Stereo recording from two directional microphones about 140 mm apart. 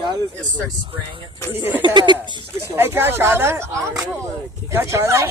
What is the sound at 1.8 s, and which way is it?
Speech, 30° right (ahead or behind).